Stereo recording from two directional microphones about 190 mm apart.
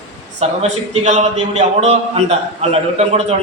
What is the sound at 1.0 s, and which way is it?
A man's voice, 35° right (ahead or behind).